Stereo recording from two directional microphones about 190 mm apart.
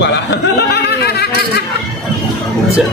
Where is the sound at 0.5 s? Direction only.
55° left (ahead or behind).